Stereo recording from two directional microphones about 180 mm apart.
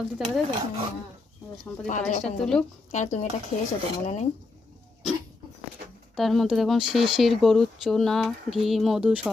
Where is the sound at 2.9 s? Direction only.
40° left (ahead or behind).